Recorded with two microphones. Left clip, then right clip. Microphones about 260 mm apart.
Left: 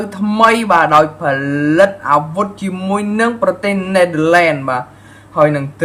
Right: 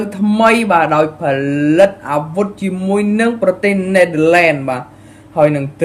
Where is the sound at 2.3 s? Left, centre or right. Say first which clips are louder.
Even; centre.